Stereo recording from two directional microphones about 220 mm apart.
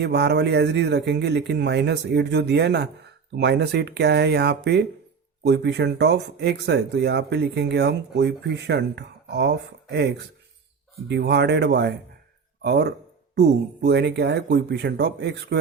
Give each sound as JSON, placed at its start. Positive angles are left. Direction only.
{"t": 0.0, "sound": "speech", "side_deg": -50}